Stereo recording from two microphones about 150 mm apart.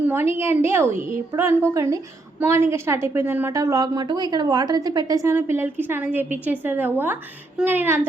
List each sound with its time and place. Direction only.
0.0 s a woman's voice: 15° right (ahead or behind)